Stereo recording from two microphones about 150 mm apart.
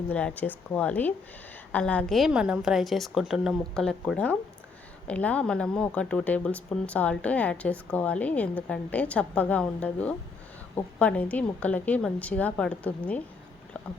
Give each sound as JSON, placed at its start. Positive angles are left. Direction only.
{"t": 0.1, "sound": "a woman's voice", "side_deg": 10}